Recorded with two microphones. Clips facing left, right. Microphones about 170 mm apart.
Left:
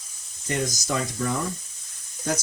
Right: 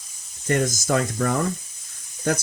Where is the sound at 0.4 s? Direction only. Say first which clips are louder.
Right 5 dB; 55° right (ahead or behind).